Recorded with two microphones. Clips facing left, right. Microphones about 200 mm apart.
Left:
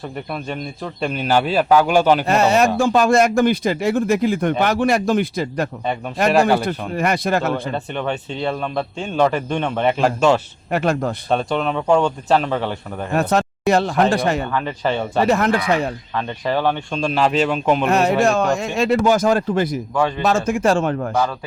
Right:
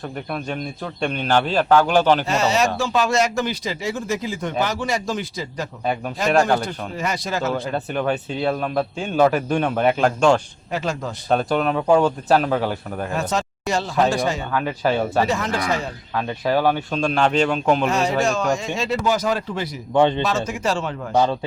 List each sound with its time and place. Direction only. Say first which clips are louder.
1.0 s speech: left 2 dB; 5° left (ahead or behind)
2.2 s speech: left 4 dB; 55° left (ahead or behind)
6.7 s speech: left 6 dB; 60° left (ahead or behind)
7.7 s a man's voice: right 1 dB; 5° right (ahead or behind)
10.7 s speech: left 6 dB; 60° left (ahead or behind)
11.3 s a man's voice: right 2 dB; 5° right (ahead or behind)
13.1 s speech: left 8 dB; 60° left (ahead or behind)
14.5 s a man's voice: even; 5° right (ahead or behind)
15.3 s speech: left 5 dB; 60° left (ahead or behind)
16.1 s a man's voice: right 2 dB; 5° right (ahead or behind)
17.8 s speech: left 4 dB; 60° left (ahead or behind)
19.9 s speech: right 3 dB; 25° right (ahead or behind)
20.2 s a man's voice: left 5 dB; 50° left (ahead or behind)